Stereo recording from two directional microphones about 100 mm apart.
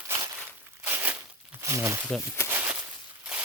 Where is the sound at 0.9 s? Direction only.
20° right (ahead or behind).